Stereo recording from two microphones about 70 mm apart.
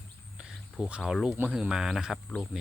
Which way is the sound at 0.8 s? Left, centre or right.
Centre.